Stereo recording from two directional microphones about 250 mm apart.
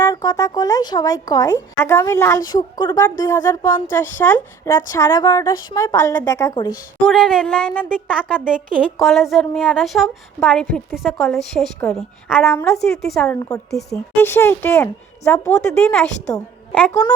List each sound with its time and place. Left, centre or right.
0.0 s speech: centre
7.0 s a woman's voice: centre